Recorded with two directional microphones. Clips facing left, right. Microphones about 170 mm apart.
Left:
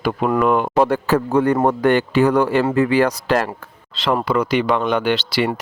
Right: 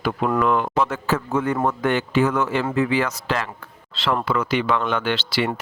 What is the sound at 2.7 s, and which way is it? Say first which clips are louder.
Speech: left 4 dB; 55° left (ahead or behind).